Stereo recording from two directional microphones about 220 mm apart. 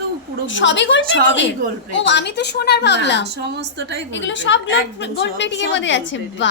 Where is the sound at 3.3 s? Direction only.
50° right (ahead or behind).